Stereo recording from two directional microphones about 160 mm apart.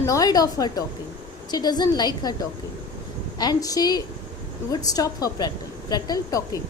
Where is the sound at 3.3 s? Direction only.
25° left (ahead or behind).